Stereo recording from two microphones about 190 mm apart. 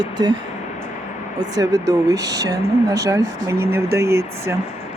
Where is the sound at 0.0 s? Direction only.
25° right (ahead or behind).